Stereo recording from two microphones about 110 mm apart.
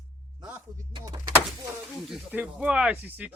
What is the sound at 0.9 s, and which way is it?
Speech, 40° right (ahead or behind).